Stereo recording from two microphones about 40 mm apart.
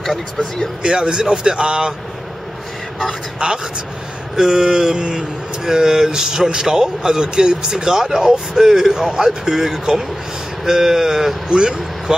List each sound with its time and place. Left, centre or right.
0.0 s speech: centre
0.8 s a man's voice: right
3.4 s a man's voice: right
4.4 s speech: centre
11.4 s speech: right